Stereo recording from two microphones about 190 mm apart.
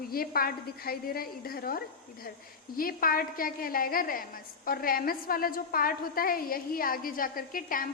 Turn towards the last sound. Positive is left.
turn(degrees=45)  # may be behind; listen again after turning